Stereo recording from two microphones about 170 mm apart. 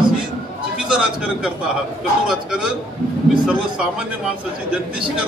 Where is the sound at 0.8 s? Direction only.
5° right (ahead or behind).